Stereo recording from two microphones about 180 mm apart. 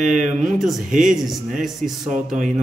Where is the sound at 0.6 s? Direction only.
Centre (ahead or behind).